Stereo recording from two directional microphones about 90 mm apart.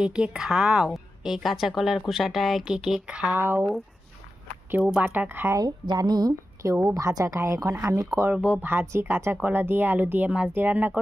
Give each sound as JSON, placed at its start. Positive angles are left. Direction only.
{"t": 0.0, "sound": "a woman's voice", "side_deg": -10}
{"t": 3.3, "sound": "a woman's voice", "side_deg": -25}
{"t": 5.9, "sound": "a woman's voice", "side_deg": -50}
{"t": 8.3, "sound": "a woman's voice", "side_deg": -15}